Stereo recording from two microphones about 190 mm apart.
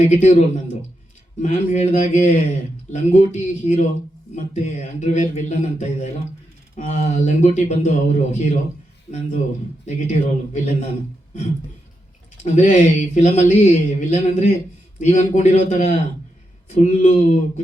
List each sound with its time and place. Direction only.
0.1 s a man's voice: 40° left (ahead or behind)
9.8 s a man's voice: 40° left (ahead or behind)
12.5 s a man's voice: 40° left (ahead or behind)